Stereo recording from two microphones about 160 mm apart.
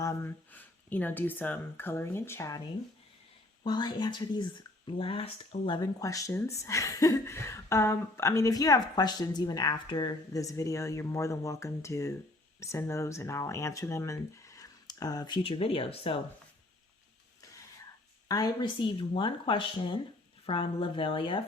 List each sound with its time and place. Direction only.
0.0 s speech: 15° left (ahead or behind)
3.6 s a woman's voice: 25° left (ahead or behind)
18.3 s speech: 25° left (ahead or behind)